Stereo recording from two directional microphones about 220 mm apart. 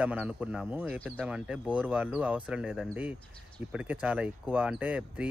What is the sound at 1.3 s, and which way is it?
Speech, 5° right (ahead or behind).